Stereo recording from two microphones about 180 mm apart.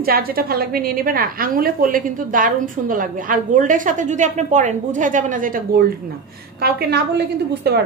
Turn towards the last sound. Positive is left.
turn(degrees=-65)  # may be behind; listen again after turning